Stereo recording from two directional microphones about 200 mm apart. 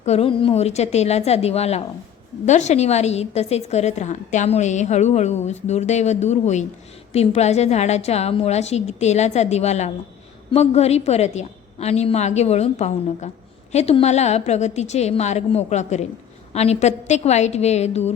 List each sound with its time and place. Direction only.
0.0 s a woman's voice: 30° left (ahead or behind)